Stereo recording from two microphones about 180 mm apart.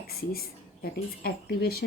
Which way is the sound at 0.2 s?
55° left (ahead or behind).